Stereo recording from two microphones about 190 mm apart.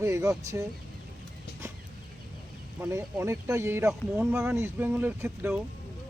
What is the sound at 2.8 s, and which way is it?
Speech, 15° right (ahead or behind).